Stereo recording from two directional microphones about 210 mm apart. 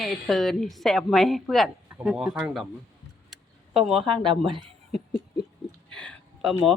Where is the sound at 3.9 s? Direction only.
25° right (ahead or behind).